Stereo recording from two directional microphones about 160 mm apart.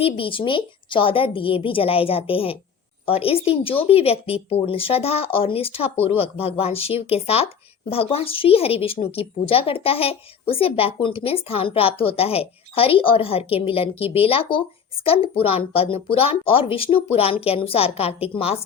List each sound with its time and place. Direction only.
0.0 s speech: 35° left (ahead or behind)